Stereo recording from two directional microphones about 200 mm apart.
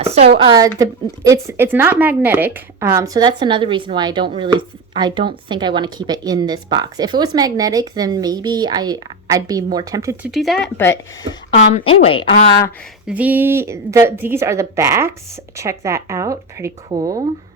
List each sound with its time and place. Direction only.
0.0 s a woman's voice: 30° right (ahead or behind); by 10.3 s 15° right (ahead or behind)
10.3 s speech: centre (ahead or behind)
11.7 s a woman's voice: 30° left (ahead or behind)
13.1 s a woman's voice: 10° right (ahead or behind)